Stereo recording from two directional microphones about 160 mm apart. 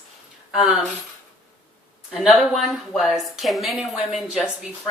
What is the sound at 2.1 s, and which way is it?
A woman's voice, centre (ahead or behind).